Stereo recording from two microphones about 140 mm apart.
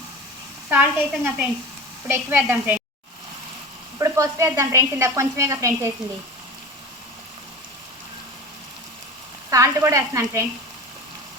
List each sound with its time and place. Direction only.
0.7 s a woman's voice: 10° right (ahead or behind)
3.9 s sizzle: 25° right (ahead or behind)
9.5 s sizzle: 20° right (ahead or behind)